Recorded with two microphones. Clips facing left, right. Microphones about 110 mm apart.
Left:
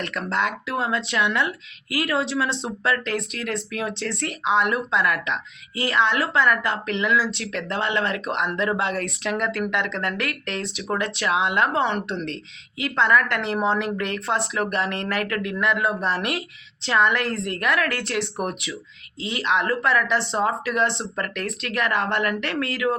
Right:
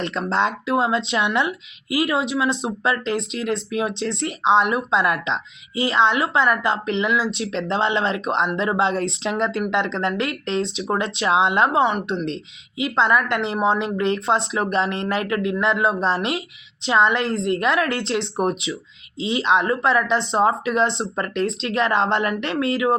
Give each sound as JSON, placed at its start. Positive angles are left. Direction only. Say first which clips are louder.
{"t": 0.0, "sound": "speech", "louder": "right 4 dB", "side_deg": -25}